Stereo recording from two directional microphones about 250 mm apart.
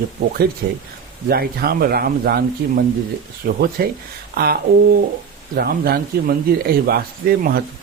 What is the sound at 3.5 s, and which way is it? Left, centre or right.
Speech, right.